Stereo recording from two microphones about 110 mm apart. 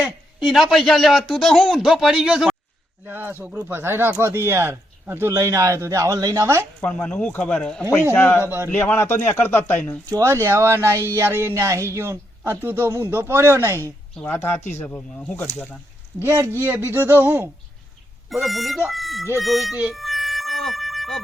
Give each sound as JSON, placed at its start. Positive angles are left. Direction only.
{"t": 0.0, "sound": "a man's voice", "side_deg": -5}
{"t": 3.1, "sound": "speech", "side_deg": -20}
{"t": 6.8, "sound": "speech", "side_deg": 10}
{"t": 8.1, "sound": "speech", "side_deg": 20}
{"t": 8.4, "sound": "speech", "side_deg": -20}
{"t": 8.7, "sound": "speech", "side_deg": 15}
{"t": 10.1, "sound": "speech", "side_deg": -25}
{"t": 14.2, "sound": "speech", "side_deg": 20}
{"t": 16.2, "sound": "speech", "side_deg": -25}
{"t": 18.3, "sound": "a man's voice", "side_deg": 0}
{"t": 19.9, "sound": "a sound", "side_deg": 0}